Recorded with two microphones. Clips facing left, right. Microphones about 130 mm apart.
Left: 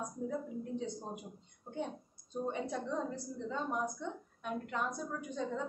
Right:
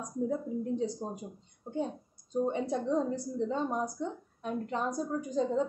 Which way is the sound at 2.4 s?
35° right (ahead or behind).